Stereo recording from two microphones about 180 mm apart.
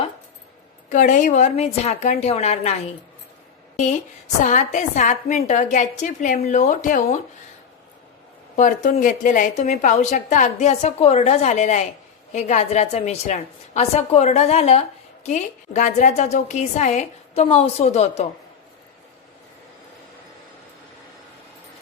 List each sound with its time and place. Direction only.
0.9 s a woman's voice: 45° left (ahead or behind)
4.4 s a woman's voice: 40° left (ahead or behind)
8.5 s a woman's voice: 45° left (ahead or behind)